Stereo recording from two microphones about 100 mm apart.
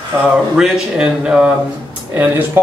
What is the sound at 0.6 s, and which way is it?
Speech, 5° right (ahead or behind).